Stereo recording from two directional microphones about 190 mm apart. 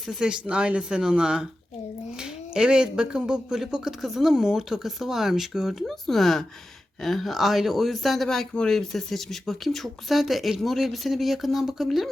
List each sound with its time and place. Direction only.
0.0 s speech: 5° right (ahead or behind)